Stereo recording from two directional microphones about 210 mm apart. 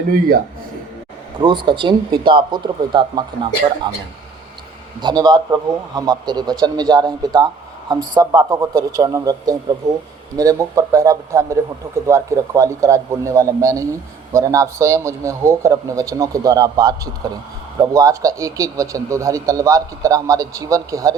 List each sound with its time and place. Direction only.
1.4 s a man's voice: 20° right (ahead or behind)
4.9 s a man's voice: 20° right (ahead or behind)